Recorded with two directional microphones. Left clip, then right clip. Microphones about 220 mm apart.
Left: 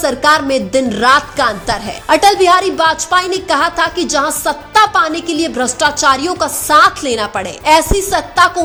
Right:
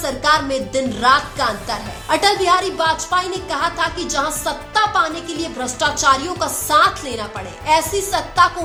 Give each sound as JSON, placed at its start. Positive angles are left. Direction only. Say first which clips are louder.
{"t": 0.0, "sound": "a woman's voice", "louder": "left 5 dB", "side_deg": 35}